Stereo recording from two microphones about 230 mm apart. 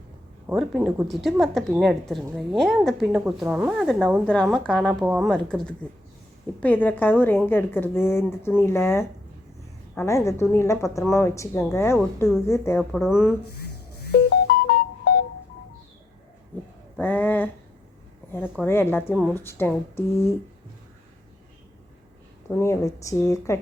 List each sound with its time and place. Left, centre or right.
0.4 s a woman's voice: centre
12.5 s a woman's voice: centre
13.6 s music: left
17.0 s a woman's voice: centre
18.6 s a woman's voice: centre
22.4 s a woman's voice: centre